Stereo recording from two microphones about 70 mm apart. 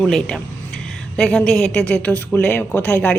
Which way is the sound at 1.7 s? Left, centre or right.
Left.